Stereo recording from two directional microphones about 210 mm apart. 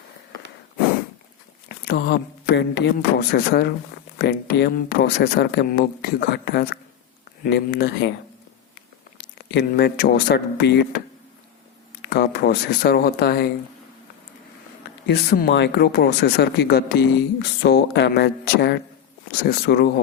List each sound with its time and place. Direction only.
1.9 s a man's voice: 50° left (ahead or behind)
9.5 s a man's voice: 50° left (ahead or behind)
12.0 s a man's voice: 50° left (ahead or behind)
15.0 s a man's voice: 50° left (ahead or behind)